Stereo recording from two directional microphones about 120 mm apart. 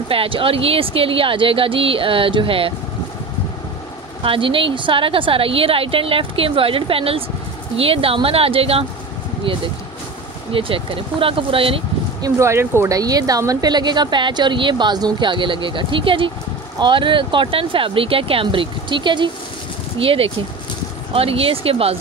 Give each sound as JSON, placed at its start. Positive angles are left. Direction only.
{"t": 0.1, "sound": "a woman's voice", "side_deg": -50}
{"t": 4.2, "sound": "a woman's voice", "side_deg": -45}
{"t": 10.5, "sound": "a woman's voice", "side_deg": -50}
{"t": 12.2, "sound": "a woman's voice", "side_deg": -25}